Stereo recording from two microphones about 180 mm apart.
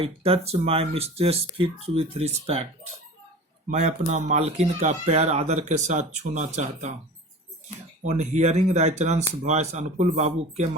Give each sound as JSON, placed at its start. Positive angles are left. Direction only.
{"t": 0.0, "sound": "speech", "side_deg": -30}
{"t": 3.7, "sound": "speech", "side_deg": -40}
{"t": 8.0, "sound": "speech", "side_deg": -40}